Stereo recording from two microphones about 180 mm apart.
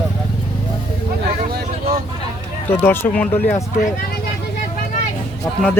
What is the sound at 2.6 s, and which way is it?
Speech, 10° left (ahead or behind).